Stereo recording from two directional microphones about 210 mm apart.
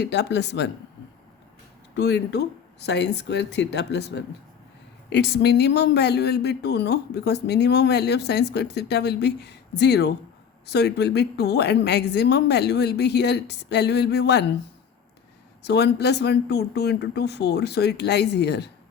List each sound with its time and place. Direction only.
0.0 s speech: 55° left (ahead or behind)
2.0 s speech: 55° left (ahead or behind)
15.6 s speech: 50° left (ahead or behind)